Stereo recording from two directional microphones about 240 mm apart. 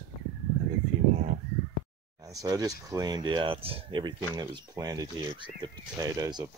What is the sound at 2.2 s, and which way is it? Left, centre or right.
Speech, centre.